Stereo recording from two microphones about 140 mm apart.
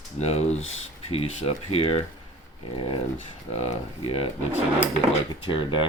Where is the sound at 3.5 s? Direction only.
50° left (ahead or behind).